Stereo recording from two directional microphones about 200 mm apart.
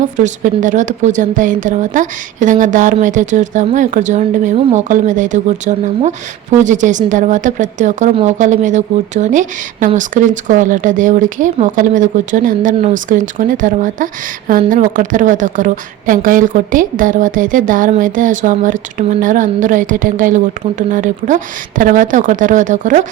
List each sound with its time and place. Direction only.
0.2 s a woman's voice: 40° right (ahead or behind)